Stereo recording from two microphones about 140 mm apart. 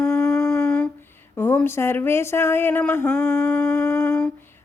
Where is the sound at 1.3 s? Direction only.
15° left (ahead or behind).